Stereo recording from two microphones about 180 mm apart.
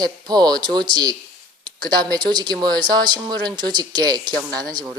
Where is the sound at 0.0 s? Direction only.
20° right (ahead or behind).